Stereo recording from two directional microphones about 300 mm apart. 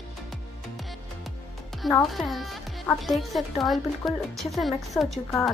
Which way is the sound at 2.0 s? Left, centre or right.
Centre.